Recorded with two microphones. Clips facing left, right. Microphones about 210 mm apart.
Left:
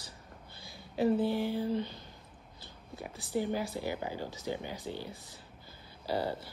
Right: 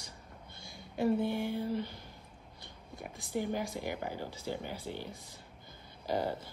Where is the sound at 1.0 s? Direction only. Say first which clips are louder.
Left 2 dB; 55° right (ahead or behind).